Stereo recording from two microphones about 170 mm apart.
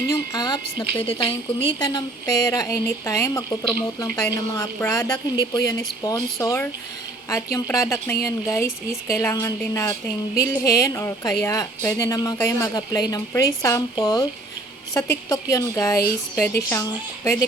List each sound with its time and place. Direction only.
0.1 s speech: 25° left (ahead or behind)
15.3 s speech: 20° left (ahead or behind)